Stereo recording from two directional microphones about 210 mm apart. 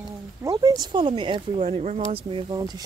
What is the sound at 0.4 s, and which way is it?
Speech, 15° right (ahead or behind).